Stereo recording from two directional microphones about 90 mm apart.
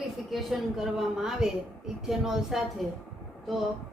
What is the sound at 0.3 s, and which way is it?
A woman's voice, 5° right (ahead or behind).